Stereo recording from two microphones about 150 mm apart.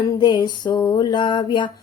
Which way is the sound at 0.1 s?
30° left (ahead or behind).